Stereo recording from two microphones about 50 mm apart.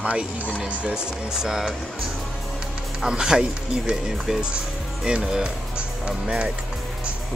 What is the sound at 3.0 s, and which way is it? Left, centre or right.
Speech, centre.